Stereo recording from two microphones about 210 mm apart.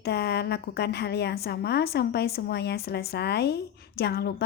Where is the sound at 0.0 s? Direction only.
50° left (ahead or behind).